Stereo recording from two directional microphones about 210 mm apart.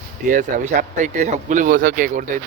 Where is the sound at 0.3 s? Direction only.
35° right (ahead or behind).